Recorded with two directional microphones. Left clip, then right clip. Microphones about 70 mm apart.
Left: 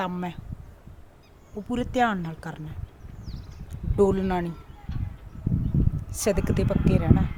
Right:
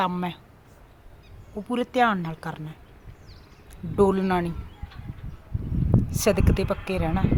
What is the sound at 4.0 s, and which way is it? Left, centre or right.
Speech, left.